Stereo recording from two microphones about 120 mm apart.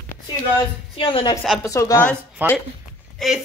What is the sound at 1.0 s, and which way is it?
Speech, 45° left (ahead or behind).